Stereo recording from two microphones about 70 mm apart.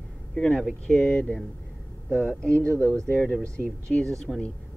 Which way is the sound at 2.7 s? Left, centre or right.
Right.